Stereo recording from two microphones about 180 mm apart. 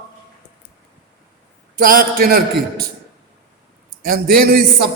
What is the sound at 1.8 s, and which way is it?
Speech, 50° right (ahead or behind).